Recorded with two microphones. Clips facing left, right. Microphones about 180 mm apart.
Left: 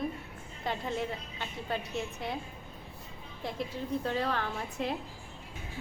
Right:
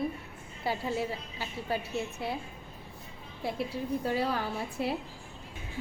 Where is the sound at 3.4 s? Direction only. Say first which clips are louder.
Right 3 dB; 10° right (ahead or behind).